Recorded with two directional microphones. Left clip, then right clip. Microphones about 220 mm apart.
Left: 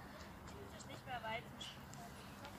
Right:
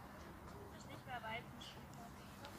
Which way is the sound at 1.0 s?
50° left (ahead or behind).